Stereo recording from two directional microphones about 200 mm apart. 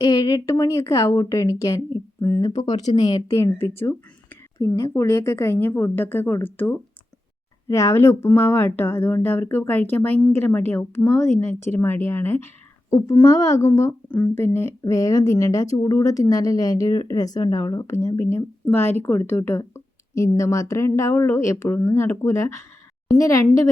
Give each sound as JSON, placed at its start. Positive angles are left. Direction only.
{"t": 0.0, "sound": "a woman's voice", "side_deg": 20}
{"t": 2.6, "sound": "speech", "side_deg": 30}
{"t": 3.1, "sound": "a woman's voice", "side_deg": 15}